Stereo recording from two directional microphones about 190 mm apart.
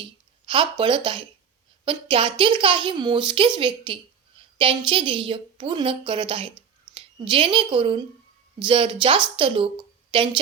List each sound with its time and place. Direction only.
0.0 s a woman's voice: 25° right (ahead or behind)